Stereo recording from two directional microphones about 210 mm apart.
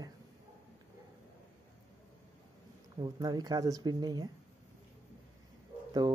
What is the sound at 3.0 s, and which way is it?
Speech, 20° right (ahead or behind).